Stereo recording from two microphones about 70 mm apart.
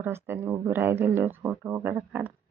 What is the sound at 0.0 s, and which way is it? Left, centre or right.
Speech, right.